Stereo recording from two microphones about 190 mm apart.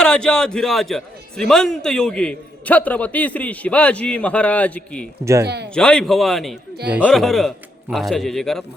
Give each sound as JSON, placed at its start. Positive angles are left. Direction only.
{"t": 0.0, "sound": "a man's voice", "side_deg": 5}
{"t": 5.2, "sound": "speech", "side_deg": -15}
{"t": 5.7, "sound": "a man's voice", "side_deg": 5}